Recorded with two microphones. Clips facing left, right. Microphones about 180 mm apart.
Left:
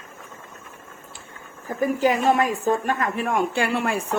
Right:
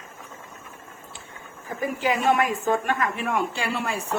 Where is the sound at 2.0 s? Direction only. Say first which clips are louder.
Left 2 dB; 40° left (ahead or behind).